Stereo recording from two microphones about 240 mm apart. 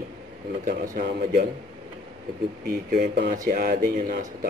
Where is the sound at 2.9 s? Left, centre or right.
Right.